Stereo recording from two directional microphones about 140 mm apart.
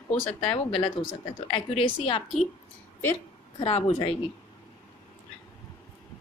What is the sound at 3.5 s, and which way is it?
Speech, 45° left (ahead or behind).